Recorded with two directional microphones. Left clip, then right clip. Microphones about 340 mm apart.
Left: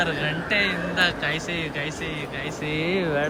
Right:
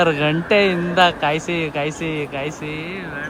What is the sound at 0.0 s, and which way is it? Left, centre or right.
A man's voice, centre.